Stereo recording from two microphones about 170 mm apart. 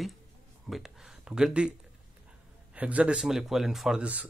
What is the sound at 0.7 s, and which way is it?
Speech, centre (ahead or behind).